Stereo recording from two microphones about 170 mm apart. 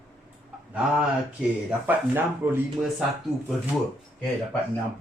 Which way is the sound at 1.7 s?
10° right (ahead or behind).